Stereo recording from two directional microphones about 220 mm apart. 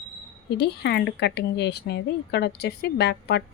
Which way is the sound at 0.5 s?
50° left (ahead or behind).